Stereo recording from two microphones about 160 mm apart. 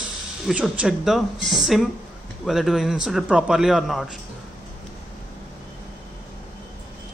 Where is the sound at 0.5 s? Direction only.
5° right (ahead or behind).